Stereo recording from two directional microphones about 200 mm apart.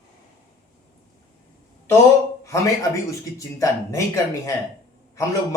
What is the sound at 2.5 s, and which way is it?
A man's voice, 15° left (ahead or behind).